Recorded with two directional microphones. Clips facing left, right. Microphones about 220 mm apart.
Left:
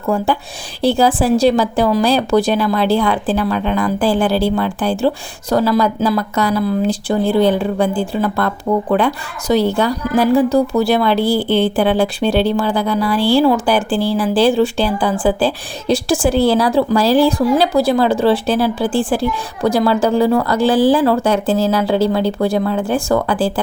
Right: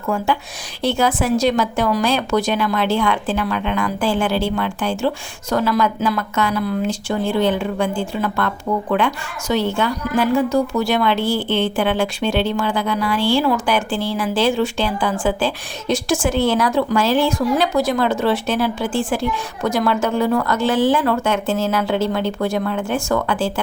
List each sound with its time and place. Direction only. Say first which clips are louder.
0.8 s a woman's voice: left 5 dB; 35° left (ahead or behind)